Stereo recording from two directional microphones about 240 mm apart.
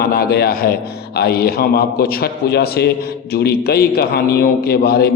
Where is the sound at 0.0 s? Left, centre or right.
Left.